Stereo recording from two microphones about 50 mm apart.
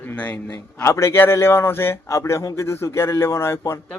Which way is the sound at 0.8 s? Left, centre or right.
Left.